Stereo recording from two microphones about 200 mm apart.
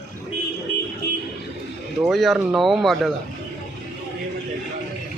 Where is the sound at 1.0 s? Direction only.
50° left (ahead or behind).